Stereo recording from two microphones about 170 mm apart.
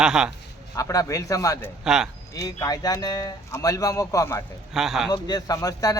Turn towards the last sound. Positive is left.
turn(degrees=20)  # may be behind; listen again after turning